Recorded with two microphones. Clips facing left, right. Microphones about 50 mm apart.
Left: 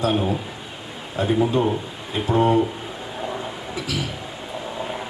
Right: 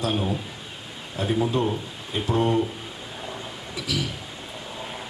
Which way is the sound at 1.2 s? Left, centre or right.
Centre.